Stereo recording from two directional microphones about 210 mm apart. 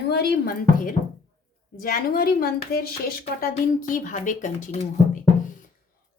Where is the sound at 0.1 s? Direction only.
50° left (ahead or behind).